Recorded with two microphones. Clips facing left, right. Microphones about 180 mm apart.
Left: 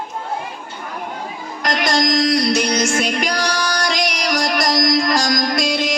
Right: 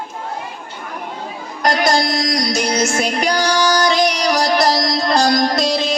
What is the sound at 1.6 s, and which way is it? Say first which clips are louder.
Music: right 2 dB; 35° right (ahead or behind).